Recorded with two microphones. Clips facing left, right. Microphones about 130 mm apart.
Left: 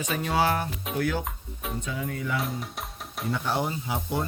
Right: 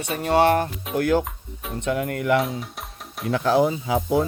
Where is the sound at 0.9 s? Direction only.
55° right (ahead or behind).